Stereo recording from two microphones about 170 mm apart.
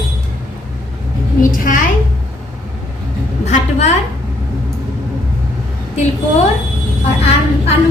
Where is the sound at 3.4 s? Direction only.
40° left (ahead or behind).